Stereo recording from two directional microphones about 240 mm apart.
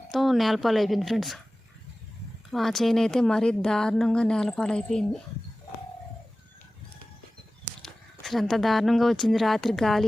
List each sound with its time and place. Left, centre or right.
0.1 s speech: centre
2.5 s speech: centre
7.6 s speech: centre